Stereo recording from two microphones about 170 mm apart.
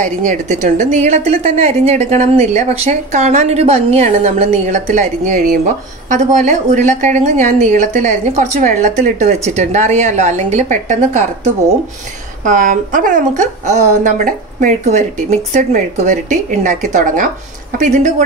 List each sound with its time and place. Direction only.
0.0 s a woman's voice: 50° right (ahead or behind)
12.4 s a woman's voice: 50° right (ahead or behind)